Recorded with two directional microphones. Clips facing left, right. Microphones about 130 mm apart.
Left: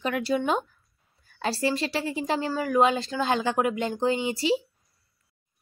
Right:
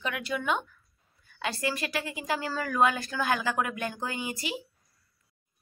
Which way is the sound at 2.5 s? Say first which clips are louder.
Left 4 dB; 15° left (ahead or behind).